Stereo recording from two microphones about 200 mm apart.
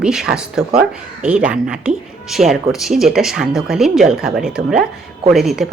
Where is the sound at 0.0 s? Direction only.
5° right (ahead or behind).